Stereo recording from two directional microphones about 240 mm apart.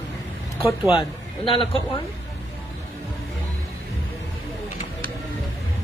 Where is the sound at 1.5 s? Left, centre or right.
Left.